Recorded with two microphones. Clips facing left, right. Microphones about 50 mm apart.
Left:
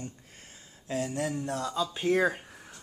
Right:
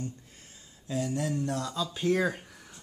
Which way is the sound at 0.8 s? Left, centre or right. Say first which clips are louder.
Even; left.